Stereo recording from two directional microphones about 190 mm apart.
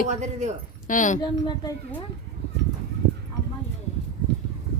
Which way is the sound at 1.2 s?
25° left (ahead or behind).